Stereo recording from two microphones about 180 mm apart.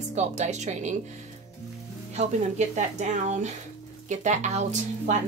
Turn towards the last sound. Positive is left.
turn(degrees=-40)  # may be behind; listen again after turning